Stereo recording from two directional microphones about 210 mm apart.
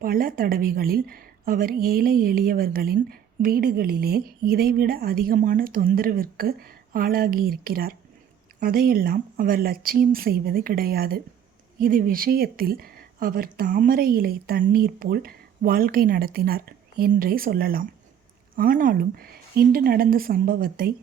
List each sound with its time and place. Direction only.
0.0 s a woman's voice: 45° right (ahead or behind)